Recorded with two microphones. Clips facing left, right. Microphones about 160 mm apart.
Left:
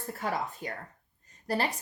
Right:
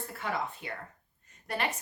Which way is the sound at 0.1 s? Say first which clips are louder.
Left 3 dB; 40° left (ahead or behind).